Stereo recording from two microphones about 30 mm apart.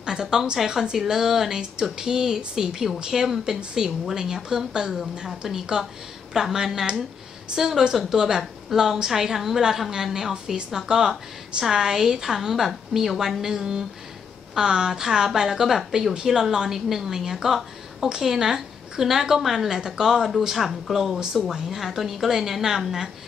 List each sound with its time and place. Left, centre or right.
0.0 s a woman's voice: centre